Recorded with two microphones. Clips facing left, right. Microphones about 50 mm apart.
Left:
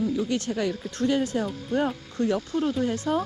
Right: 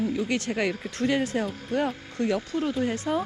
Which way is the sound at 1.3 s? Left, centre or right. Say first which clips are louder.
Even; right.